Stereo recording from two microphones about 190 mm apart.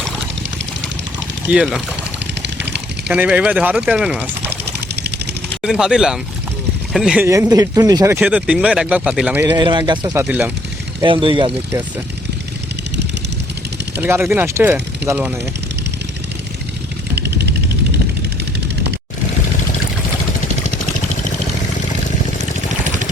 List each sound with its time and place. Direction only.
1.5 s speech: 5° right (ahead or behind)
3.1 s speech: 5° right (ahead or behind)
5.6 s speech: 5° right (ahead or behind)
7.3 s speech: 15° right (ahead or behind)
9.6 s speech: 25° right (ahead or behind); by 10.5 s 10° right (ahead or behind)
11.0 s speech: 25° right (ahead or behind)
14.0 s speech: 10° right (ahead or behind)
17.2 s vehicle: 60° right (ahead or behind)